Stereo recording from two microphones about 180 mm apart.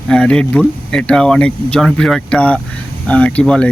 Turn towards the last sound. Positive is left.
turn(degrees=5)  # may be behind; listen again after turning